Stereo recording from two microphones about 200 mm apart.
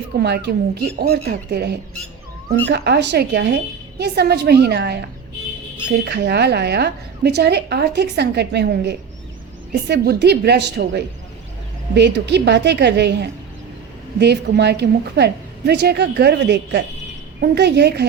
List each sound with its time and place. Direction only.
0.2 s a woman's voice: 55° right (ahead or behind)
6.1 s a woman's voice: 55° right (ahead or behind)